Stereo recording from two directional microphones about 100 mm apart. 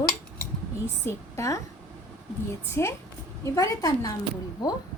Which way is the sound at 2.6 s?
25° left (ahead or behind).